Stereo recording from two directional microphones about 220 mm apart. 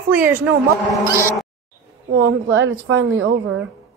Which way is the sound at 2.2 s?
55° right (ahead or behind).